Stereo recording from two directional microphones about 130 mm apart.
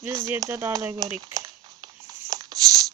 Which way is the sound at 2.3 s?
30° right (ahead or behind).